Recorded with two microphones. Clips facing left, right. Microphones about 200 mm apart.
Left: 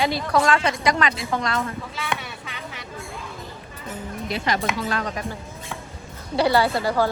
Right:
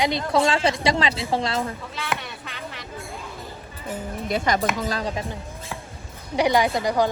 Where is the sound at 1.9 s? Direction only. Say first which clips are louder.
Even; centre (ahead or behind).